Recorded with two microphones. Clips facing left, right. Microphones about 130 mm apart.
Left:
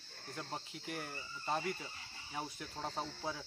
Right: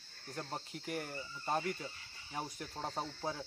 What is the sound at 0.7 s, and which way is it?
Speech, 50° right (ahead or behind).